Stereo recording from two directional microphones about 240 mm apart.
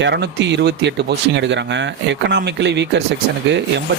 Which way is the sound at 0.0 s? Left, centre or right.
Right.